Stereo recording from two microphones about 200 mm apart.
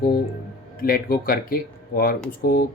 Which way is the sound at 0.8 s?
45° left (ahead or behind).